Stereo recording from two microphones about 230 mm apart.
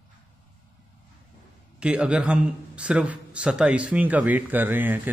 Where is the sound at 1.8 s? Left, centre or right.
Centre.